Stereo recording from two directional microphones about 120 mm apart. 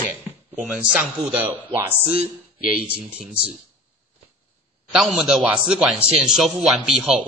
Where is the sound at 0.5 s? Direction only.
10° right (ahead or behind).